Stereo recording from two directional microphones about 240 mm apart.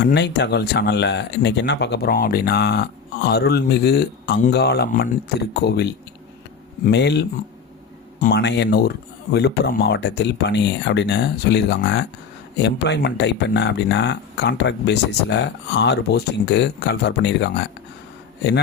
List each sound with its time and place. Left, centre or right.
0.0 s speech: left